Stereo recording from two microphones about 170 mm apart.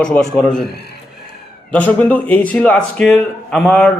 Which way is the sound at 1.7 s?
10° left (ahead or behind).